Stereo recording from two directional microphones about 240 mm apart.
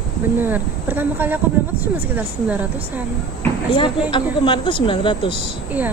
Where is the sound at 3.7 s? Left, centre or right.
Left.